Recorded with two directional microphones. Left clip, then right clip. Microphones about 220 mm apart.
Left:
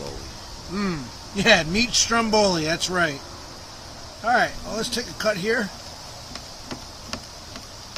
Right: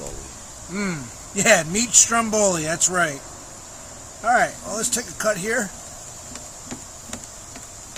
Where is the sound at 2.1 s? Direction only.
15° right (ahead or behind).